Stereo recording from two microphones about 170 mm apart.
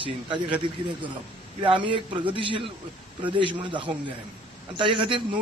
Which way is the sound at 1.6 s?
30° right (ahead or behind).